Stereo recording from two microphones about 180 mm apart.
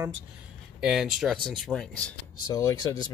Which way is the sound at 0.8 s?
5° right (ahead or behind).